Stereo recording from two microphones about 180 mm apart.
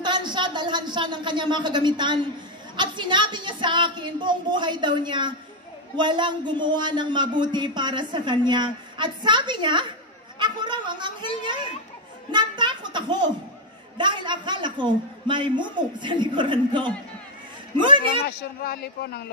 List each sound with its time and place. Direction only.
0.0 s a man's voice: 25° right (ahead or behind)
10.4 s a sound: 25° right (ahead or behind)
13.9 s a man's voice: 25° right (ahead or behind)
18.2 s speech: 55° left (ahead or behind)